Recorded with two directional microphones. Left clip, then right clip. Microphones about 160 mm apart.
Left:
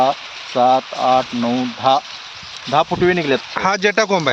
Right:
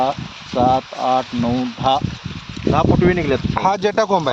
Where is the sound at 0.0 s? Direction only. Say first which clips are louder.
Left 3 dB; centre (ahead or behind).